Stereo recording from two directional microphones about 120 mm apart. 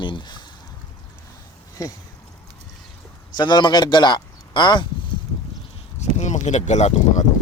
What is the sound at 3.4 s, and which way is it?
Speech, 35° left (ahead or behind).